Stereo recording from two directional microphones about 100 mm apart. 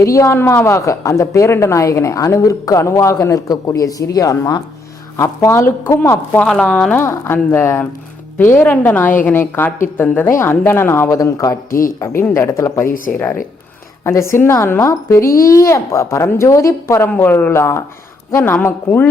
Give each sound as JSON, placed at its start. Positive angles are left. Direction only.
{"t": 0.0, "sound": "a woman's voice", "side_deg": 30}
{"t": 7.0, "sound": "a child's voice", "side_deg": 25}